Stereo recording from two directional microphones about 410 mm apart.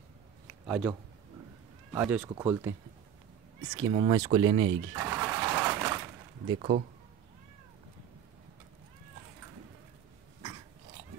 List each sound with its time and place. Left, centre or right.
0.7 s speech: centre
2.0 s speech: centre
3.7 s vehicle: centre
6.5 s speech: centre